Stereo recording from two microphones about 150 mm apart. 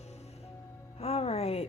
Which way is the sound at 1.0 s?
40° left (ahead or behind).